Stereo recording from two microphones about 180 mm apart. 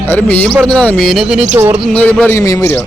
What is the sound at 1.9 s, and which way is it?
Speech, 10° left (ahead or behind).